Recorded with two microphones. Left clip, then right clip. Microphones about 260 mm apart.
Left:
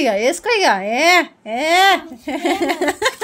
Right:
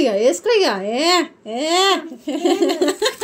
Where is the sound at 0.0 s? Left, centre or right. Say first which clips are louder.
Right 1 dB; left.